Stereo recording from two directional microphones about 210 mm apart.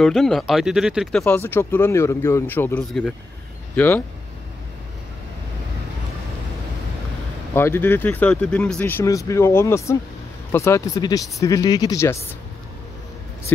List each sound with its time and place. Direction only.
0.0 s speech: centre (ahead or behind)
1.2 s speech: 10° left (ahead or behind)
7.5 s speech: 10° left (ahead or behind)